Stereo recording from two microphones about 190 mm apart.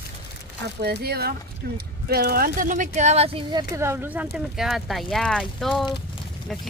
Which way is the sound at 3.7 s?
15° right (ahead or behind).